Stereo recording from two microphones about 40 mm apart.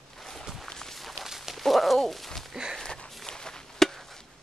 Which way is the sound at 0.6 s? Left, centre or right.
Centre.